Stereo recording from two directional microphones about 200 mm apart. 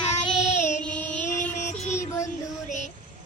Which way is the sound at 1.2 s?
40° left (ahead or behind).